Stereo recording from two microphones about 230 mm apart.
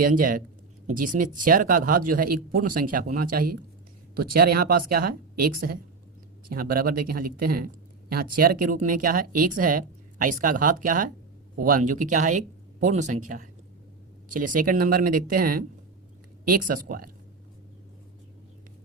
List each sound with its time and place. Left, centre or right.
0.0 s speech: right